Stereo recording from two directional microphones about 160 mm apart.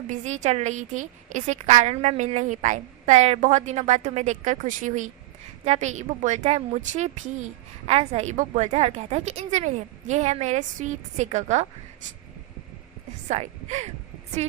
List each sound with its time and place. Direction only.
0.1 s a woman's voice: 45° right (ahead or behind)
13.2 s speech: 45° right (ahead or behind)